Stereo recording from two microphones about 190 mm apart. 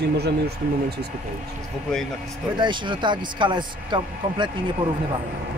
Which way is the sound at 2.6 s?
25° right (ahead or behind).